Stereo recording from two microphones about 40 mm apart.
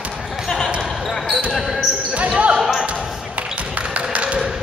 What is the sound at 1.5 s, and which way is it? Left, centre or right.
Basketball bounce, centre.